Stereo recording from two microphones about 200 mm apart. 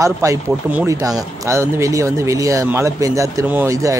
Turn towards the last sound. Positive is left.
turn(degrees=-15)  # may be behind; listen again after turning